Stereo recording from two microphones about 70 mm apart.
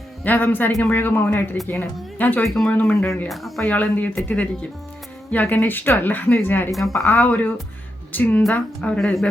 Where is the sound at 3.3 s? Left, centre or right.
Centre.